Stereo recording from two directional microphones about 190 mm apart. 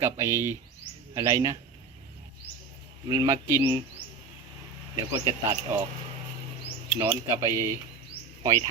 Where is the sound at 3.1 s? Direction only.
20° right (ahead or behind).